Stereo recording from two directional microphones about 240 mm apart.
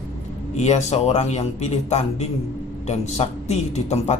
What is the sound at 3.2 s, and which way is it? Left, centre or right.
Speech, left.